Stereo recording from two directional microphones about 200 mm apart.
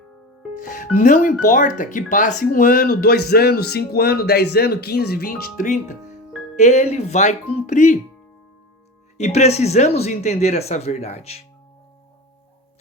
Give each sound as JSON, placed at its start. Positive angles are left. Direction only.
{"t": 0.5, "sound": "speech", "side_deg": 40}
{"t": 9.1, "sound": "speech", "side_deg": 35}